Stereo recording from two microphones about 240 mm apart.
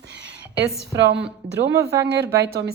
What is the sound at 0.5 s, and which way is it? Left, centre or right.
A woman's voice, right.